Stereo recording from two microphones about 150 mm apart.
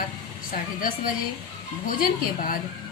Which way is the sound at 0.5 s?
70° left (ahead or behind).